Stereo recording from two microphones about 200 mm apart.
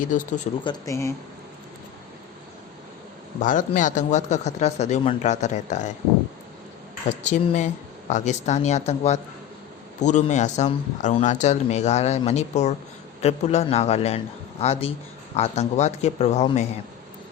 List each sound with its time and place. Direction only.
0.0 s speech: 40° left (ahead or behind)
0.6 s speech: 20° left (ahead or behind)
3.4 s speech: 40° left (ahead or behind)
7.3 s speech: 35° left (ahead or behind)